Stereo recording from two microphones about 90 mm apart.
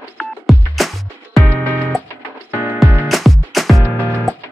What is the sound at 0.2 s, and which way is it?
Music, centre (ahead or behind).